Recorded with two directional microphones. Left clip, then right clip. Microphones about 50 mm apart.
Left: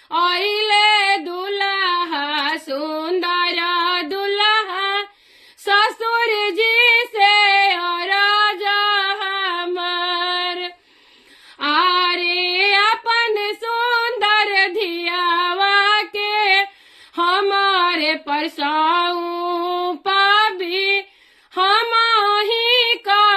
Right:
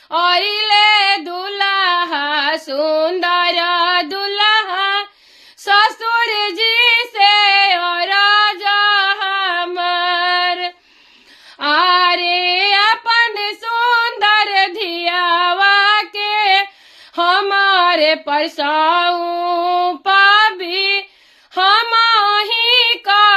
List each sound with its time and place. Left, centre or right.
0.1 s female singing: right
11.6 s female singing: centre
13.2 s child singing: right
14.2 s female singing: right
19.1 s female singing: right
21.5 s child singing: right